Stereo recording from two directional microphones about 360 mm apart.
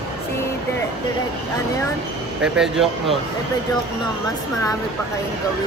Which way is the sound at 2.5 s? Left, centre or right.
Centre.